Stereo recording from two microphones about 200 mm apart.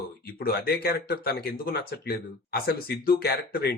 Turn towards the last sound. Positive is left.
turn(degrees=50)  # may be behind; listen again after turning